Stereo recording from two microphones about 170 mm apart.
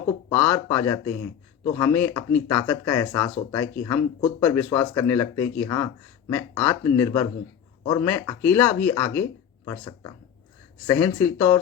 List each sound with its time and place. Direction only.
0.3 s speech: 15° left (ahead or behind)
9.6 s speech: 20° left (ahead or behind)